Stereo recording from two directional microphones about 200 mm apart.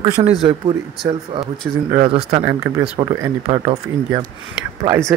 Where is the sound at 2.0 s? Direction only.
30° right (ahead or behind).